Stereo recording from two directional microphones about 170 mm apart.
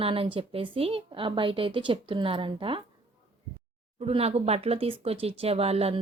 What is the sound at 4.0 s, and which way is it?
Speech, 35° right (ahead or behind).